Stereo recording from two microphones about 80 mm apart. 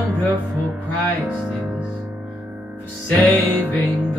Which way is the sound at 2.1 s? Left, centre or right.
Right.